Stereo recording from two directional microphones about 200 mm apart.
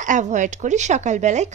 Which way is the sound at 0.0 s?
40° right (ahead or behind).